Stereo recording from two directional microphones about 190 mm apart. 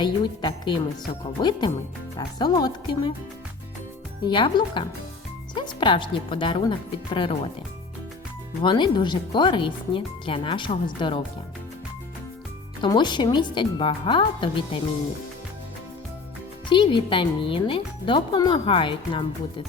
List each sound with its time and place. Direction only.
0.0 s speech: 25° left (ahead or behind)
4.3 s speech: 25° left (ahead or behind)
8.6 s speech: 25° left (ahead or behind)
12.8 s speech: 25° left (ahead or behind)
16.6 s speech: 25° left (ahead or behind)